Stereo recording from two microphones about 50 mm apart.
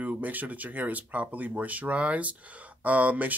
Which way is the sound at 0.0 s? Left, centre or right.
Right.